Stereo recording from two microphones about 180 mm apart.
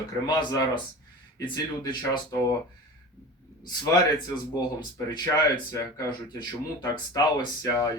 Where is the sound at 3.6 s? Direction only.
20° left (ahead or behind).